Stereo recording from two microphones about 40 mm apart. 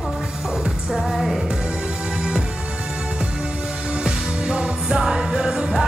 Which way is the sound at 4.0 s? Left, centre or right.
Centre.